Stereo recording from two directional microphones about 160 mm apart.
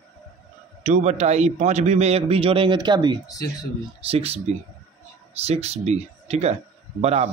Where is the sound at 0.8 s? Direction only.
45° right (ahead or behind); by 3.2 s 25° right (ahead or behind).